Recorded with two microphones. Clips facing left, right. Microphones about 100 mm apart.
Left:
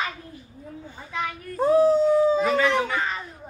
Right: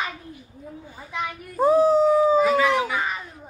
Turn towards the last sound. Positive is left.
turn(degrees=-10)  # may be behind; listen again after turning